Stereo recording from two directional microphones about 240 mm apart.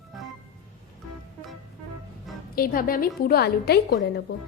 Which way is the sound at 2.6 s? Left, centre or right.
Left.